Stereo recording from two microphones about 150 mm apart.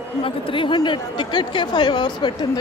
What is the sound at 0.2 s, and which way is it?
Speech, 35° left (ahead or behind).